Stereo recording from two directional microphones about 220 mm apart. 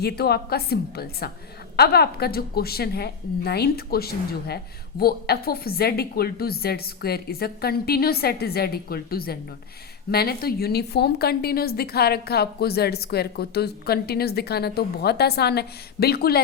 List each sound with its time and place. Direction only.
0.0 s a woman's voice: 45° left (ahead or behind)